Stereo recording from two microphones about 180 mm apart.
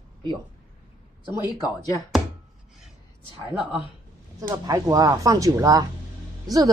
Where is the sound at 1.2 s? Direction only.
20° left (ahead or behind).